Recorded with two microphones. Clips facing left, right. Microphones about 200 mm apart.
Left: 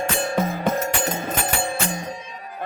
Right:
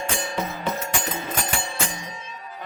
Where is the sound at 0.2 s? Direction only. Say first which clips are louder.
Left 6 dB; 55° left (ahead or behind).